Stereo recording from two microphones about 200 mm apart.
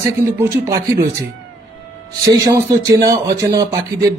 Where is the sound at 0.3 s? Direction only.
10° right (ahead or behind).